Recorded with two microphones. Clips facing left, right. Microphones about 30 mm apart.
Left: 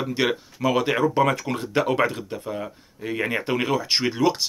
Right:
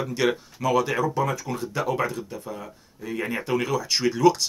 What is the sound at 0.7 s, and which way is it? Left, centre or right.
Speech, left.